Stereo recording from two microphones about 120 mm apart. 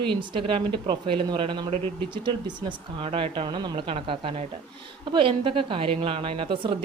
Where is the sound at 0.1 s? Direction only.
45° right (ahead or behind).